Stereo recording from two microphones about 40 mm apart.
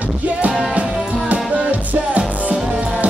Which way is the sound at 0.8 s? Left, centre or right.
Right.